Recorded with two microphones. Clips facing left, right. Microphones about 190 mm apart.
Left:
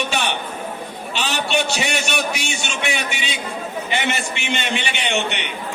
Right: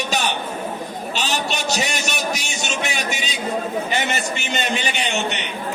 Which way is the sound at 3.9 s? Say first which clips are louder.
Even; 40° right (ahead or behind).